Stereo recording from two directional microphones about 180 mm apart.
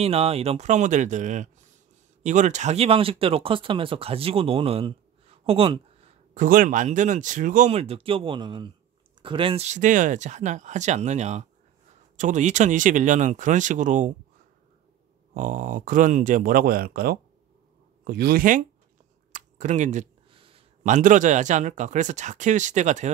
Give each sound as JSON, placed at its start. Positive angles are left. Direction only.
{"t": 0.0, "sound": "speech", "side_deg": -35}
{"t": 6.3, "sound": "speech", "side_deg": -50}
{"t": 15.3, "sound": "speech", "side_deg": -45}
{"t": 19.3, "sound": "a sound", "side_deg": -45}
{"t": 20.2, "sound": "a sound", "side_deg": -30}
{"t": 20.8, "sound": "speech", "side_deg": -45}